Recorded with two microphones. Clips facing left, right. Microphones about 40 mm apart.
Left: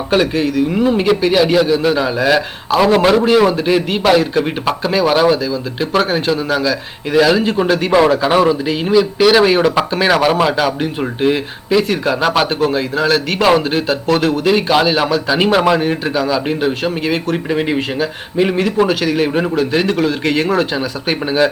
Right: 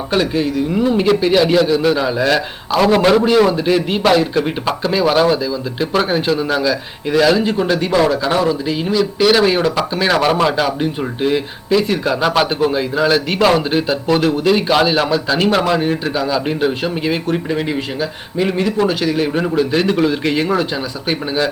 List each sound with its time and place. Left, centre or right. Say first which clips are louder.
0.7 s a man's voice: right 2 dB; centre
17.3 s a man's voice: left 2 dB; centre
18.4 s a man's voice: left 1 dB; centre
20.6 s a man's voice: left 3 dB; centre